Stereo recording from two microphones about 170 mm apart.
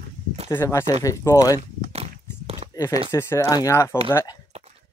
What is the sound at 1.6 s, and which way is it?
Walk, 40° right (ahead or behind).